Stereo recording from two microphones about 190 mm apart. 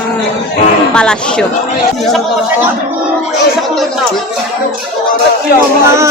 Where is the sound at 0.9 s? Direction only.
5° left (ahead or behind).